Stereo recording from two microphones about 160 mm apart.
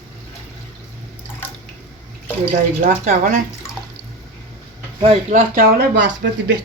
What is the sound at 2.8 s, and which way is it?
Speech, 55° right (ahead or behind).